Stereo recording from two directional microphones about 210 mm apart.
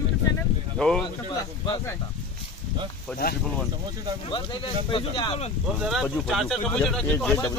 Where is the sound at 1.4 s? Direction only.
15° left (ahead or behind).